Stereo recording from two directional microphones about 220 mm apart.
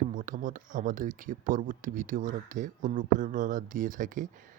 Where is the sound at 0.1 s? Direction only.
35° right (ahead or behind).